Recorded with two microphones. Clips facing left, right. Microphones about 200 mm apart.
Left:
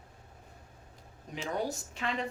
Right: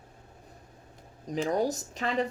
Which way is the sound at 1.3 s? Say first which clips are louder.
Right 7 dB; 40° right (ahead or behind).